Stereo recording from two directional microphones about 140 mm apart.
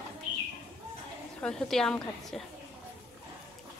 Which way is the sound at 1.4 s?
5° left (ahead or behind).